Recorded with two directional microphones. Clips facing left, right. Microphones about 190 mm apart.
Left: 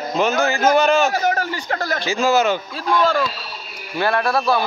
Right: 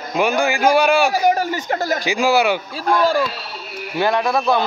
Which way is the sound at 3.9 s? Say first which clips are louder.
Right 1 dB; 15° right (ahead or behind).